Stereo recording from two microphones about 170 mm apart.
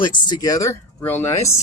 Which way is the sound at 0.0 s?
25° left (ahead or behind).